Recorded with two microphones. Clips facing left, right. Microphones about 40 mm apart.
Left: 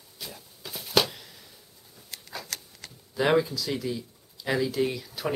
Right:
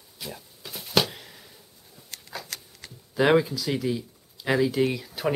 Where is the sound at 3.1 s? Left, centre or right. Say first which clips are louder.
Right 3 dB; centre.